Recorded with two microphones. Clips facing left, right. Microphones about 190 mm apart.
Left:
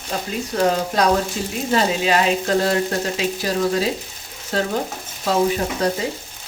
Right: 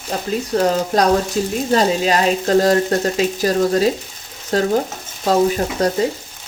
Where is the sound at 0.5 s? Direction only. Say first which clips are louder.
Right 2 dB; 40° right (ahead or behind).